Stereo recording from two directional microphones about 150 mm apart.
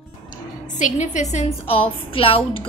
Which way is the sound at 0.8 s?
55° left (ahead or behind).